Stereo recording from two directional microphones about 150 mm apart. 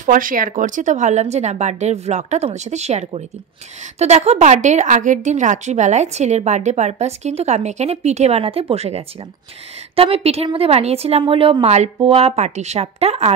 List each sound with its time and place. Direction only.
0.0 s a woman's voice: 65° right (ahead or behind); by 13.3 s 45° right (ahead or behind)